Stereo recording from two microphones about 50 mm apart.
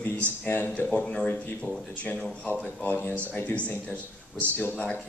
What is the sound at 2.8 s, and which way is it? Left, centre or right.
Speech, left.